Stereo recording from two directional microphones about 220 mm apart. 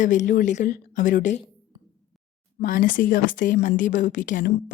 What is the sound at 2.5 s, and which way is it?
Speech, 40° left (ahead or behind).